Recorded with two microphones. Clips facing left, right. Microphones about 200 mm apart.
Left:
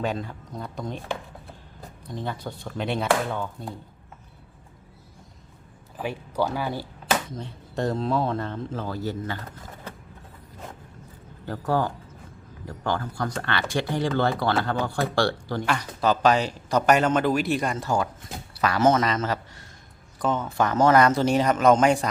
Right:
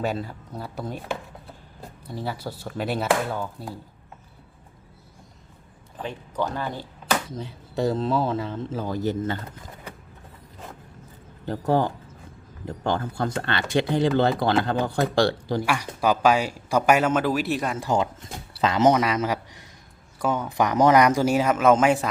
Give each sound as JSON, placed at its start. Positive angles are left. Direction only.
{"t": 0.0, "sound": "speech", "side_deg": -5}
{"t": 2.0, "sound": "speech", "side_deg": -10}
{"t": 6.0, "sound": "speech", "side_deg": 10}
{"t": 7.3, "sound": "speech", "side_deg": 0}
{"t": 8.8, "sound": "speech", "side_deg": -15}
{"t": 11.4, "sound": "speech", "side_deg": -20}
{"t": 17.8, "sound": "speech", "side_deg": -20}